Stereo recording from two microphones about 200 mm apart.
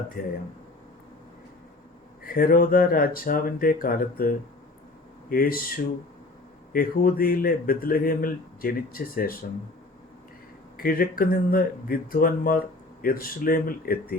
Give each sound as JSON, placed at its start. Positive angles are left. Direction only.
{"t": 0.2, "sound": "speech", "side_deg": 45}
{"t": 2.2, "sound": "speech", "side_deg": 45}
{"t": 10.8, "sound": "speech", "side_deg": 45}